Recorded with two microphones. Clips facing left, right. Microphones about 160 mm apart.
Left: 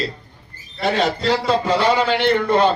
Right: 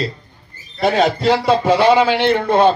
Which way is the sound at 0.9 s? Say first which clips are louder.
Right 4 dB; 55° right (ahead or behind).